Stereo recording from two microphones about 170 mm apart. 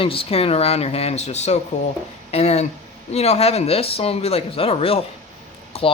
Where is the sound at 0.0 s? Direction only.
35° left (ahead or behind).